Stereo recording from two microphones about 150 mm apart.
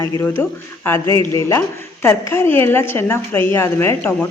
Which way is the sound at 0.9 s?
20° left (ahead or behind).